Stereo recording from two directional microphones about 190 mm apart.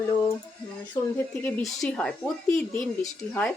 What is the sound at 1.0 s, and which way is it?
Speech, 20° left (ahead or behind).